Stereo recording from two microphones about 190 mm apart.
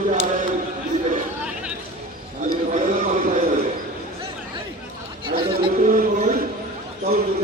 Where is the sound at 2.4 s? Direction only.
45° right (ahead or behind).